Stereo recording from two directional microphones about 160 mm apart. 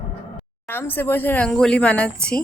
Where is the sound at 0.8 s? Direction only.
10° left (ahead or behind).